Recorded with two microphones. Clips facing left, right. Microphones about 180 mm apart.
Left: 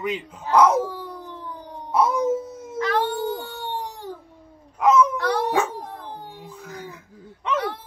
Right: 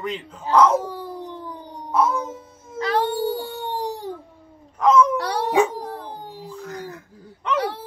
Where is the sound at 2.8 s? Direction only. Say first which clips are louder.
Right 1 dB; 30° right (ahead or behind).